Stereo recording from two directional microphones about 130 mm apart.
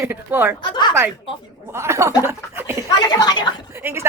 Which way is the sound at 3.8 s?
15° right (ahead or behind).